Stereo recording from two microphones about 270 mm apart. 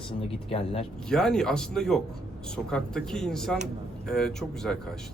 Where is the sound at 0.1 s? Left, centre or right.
Left.